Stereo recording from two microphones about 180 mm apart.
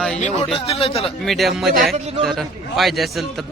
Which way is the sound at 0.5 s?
35° left (ahead or behind).